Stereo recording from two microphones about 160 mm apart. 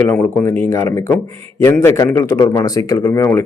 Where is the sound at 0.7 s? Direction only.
15° left (ahead or behind).